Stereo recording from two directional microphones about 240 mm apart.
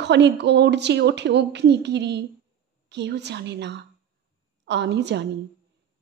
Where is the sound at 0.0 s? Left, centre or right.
Right.